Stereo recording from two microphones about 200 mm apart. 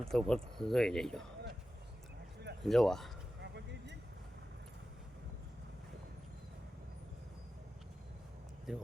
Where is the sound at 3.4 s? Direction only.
60° right (ahead or behind).